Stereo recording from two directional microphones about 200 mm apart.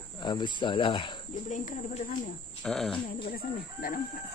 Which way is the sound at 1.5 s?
35° left (ahead or behind).